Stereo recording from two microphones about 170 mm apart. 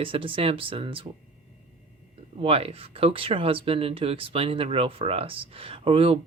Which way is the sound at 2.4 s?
35° right (ahead or behind).